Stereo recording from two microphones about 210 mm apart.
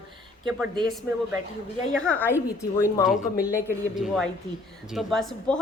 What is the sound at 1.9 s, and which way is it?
Speech, 5° left (ahead or behind).